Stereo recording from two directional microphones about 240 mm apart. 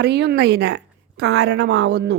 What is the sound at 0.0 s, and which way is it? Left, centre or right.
A woman's voice, right.